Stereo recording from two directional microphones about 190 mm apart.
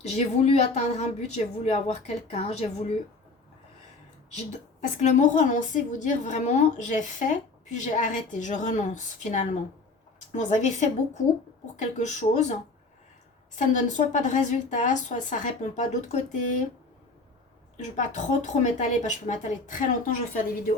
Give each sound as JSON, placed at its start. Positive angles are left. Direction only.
{"t": 0.0, "sound": "a woman's voice", "side_deg": 35}
{"t": 4.9, "sound": "a woman's voice", "side_deg": 40}
{"t": 13.6, "sound": "a woman's voice", "side_deg": 40}
{"t": 17.7, "sound": "a woman's voice", "side_deg": 40}